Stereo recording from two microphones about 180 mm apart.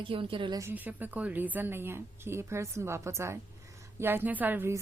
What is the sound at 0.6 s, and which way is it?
A woman's voice, 10° right (ahead or behind).